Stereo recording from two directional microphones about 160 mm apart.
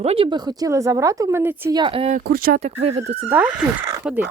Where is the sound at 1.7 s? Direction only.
30° right (ahead or behind).